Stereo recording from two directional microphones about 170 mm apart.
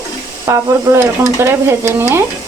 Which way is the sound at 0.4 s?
15° right (ahead or behind).